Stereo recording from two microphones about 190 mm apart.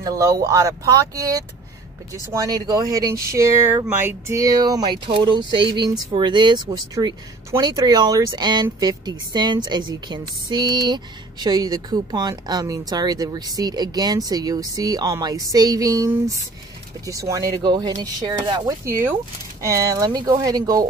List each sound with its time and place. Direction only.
0.0 s speech: 20° right (ahead or behind)